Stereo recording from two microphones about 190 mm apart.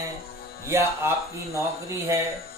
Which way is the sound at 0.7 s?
15° right (ahead or behind).